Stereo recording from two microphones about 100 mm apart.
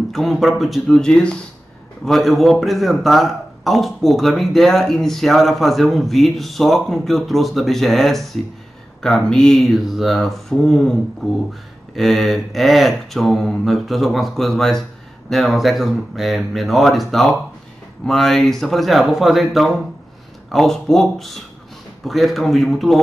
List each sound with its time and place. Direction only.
0.1 s a man's voice: centre (ahead or behind)